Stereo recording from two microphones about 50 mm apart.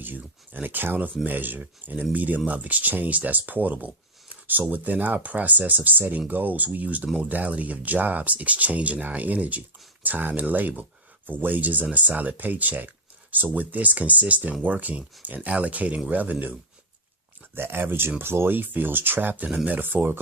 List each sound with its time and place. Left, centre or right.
0.0 s speech: right
17.5 s speech: right